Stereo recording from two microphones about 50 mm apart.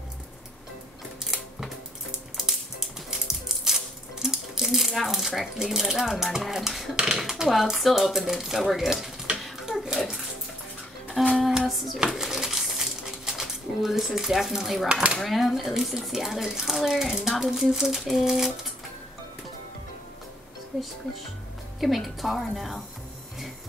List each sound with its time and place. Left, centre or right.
3.1 s a sound: centre
5.7 s speech: centre
9.7 s bathtub: centre
11.2 s music: centre
11.6 s hands: centre
12.0 s dishes: centre
14.9 s speech: right
15.1 s speech: centre
21.7 s speech: centre